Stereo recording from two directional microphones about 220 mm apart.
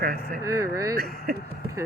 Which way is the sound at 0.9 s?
45° right (ahead or behind).